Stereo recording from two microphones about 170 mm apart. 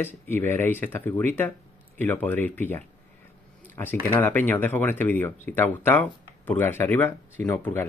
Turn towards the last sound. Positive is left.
turn(degrees=10)  # may be behind; listen again after turning